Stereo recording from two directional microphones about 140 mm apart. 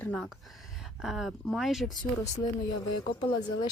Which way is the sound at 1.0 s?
5° right (ahead or behind).